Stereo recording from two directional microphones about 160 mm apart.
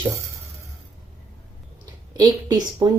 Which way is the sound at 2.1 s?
25° right (ahead or behind).